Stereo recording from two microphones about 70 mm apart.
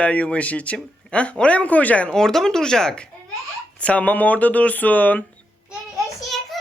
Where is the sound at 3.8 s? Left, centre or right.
Left.